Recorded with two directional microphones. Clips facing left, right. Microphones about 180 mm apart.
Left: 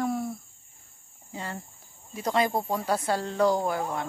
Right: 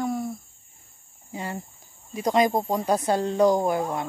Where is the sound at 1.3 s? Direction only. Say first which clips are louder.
Right 4 dB; 15° right (ahead or behind).